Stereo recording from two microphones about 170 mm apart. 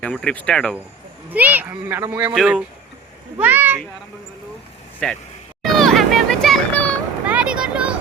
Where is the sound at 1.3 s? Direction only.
10° right (ahead or behind).